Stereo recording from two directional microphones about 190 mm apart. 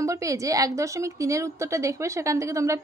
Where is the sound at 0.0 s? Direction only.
15° right (ahead or behind).